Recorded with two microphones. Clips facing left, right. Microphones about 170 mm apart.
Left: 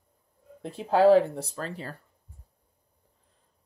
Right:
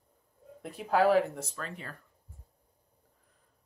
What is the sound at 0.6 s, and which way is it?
Speech, 25° left (ahead or behind).